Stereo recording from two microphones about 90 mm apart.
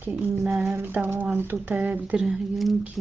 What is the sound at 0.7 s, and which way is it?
Speech, 25° right (ahead or behind).